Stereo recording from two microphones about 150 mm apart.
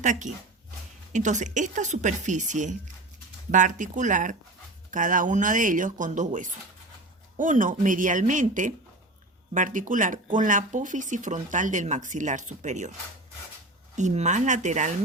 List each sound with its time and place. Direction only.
0.0 s speech: 55° right (ahead or behind)
13.9 s speech: 50° right (ahead or behind)